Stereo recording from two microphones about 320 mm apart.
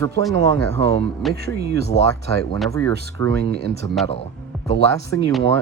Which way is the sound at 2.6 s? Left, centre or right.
Centre.